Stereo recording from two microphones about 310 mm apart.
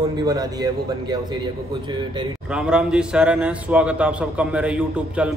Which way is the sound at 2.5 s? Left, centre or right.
Centre.